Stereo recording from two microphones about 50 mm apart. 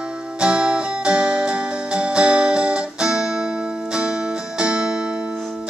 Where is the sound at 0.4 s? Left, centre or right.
Centre.